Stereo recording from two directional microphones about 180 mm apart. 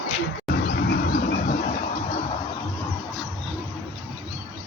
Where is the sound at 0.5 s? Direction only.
65° left (ahead or behind).